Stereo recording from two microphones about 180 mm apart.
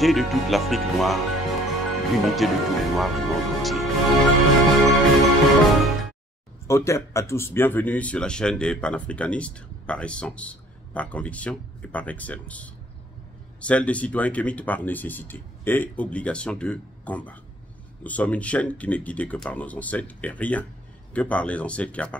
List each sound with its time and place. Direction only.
0.0 s speech: centre (ahead or behind)
4.8 s music: centre (ahead or behind)
6.7 s speech: 15° left (ahead or behind)